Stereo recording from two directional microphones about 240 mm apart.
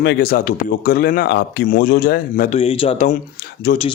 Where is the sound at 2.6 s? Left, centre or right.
Left.